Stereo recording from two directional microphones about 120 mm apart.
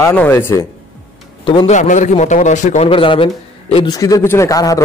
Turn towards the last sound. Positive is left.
turn(degrees=30)  # may be behind; listen again after turning